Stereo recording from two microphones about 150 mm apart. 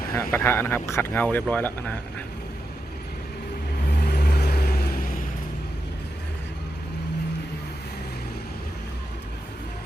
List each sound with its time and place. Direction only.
0.1 s speech: 15° left (ahead or behind)
4.0 s vehicle: 90° left; by 5.2 s 70° left (ahead or behind)